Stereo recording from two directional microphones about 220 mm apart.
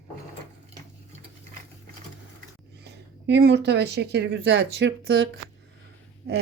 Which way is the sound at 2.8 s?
50° right (ahead or behind).